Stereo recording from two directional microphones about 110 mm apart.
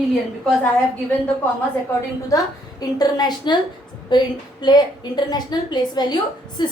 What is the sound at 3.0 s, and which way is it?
A woman's voice, 40° left (ahead or behind).